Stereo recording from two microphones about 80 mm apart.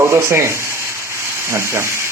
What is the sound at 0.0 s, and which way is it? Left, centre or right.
Rub, right.